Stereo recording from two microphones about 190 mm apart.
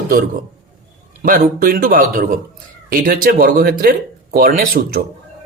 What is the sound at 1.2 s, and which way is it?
Speech, 50° right (ahead or behind).